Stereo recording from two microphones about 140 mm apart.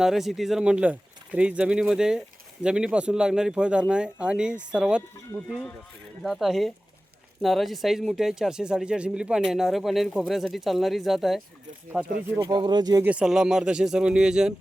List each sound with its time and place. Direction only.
0.0 s speech: centre (ahead or behind)
6.2 s speech: centre (ahead or behind)
12.4 s speech: 30° right (ahead or behind)
13.1 s speech: 5° right (ahead or behind)